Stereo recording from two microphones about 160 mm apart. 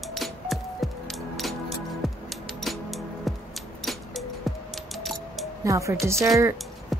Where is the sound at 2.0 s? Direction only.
Centre (ahead or behind).